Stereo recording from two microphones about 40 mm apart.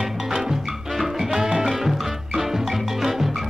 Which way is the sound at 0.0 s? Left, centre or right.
Centre.